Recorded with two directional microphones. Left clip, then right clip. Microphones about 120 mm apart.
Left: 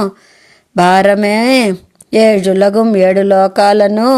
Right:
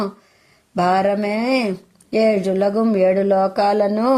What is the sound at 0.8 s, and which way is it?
Speech, 40° left (ahead or behind).